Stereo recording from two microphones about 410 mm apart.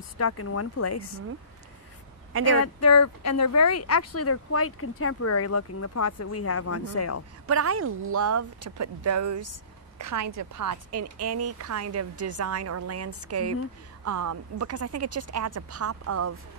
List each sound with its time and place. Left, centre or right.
0.2 s speech: left
2.5 s speech: left
7.4 s a woman's voice: right